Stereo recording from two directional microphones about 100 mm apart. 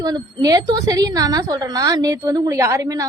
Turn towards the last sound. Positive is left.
turn(degrees=-30)  # may be behind; listen again after turning